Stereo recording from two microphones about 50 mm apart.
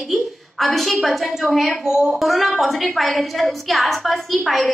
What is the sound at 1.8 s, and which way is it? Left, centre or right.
Speech, centre.